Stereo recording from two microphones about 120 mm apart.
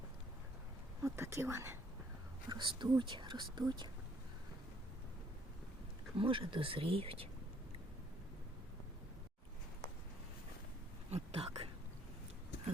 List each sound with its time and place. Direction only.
1.0 s speech: 25° right (ahead or behind)
2.5 s speech: 40° right (ahead or behind)
6.1 s speech: 45° right (ahead or behind)
11.1 s a sound: 55° right (ahead or behind)